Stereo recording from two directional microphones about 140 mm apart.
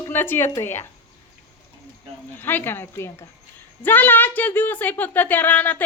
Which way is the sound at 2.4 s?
15° left (ahead or behind).